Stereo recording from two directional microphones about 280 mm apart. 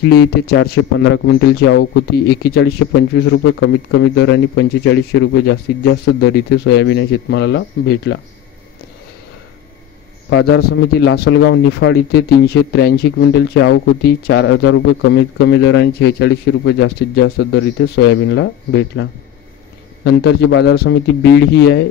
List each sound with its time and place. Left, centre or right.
0.1 s speech: left
10.3 s speech: left